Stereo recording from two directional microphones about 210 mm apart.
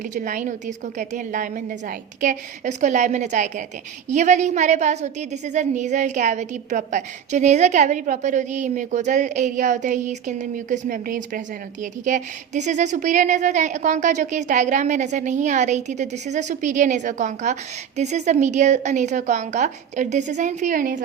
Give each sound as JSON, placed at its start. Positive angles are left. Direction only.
{"t": 0.1, "sound": "a woman's voice", "side_deg": -40}